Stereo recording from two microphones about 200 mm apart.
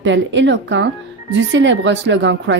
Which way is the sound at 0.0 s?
65° right (ahead or behind).